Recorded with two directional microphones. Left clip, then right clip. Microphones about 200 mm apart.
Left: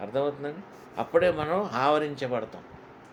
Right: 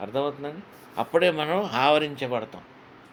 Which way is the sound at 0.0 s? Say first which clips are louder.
Right 1 dB; 30° right (ahead or behind).